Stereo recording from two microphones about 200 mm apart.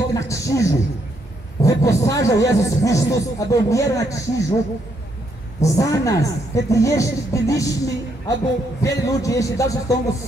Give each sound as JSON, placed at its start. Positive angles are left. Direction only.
{"t": 0.1, "sound": "a man's voice", "side_deg": 15}
{"t": 5.6, "sound": "a man's voice", "side_deg": 15}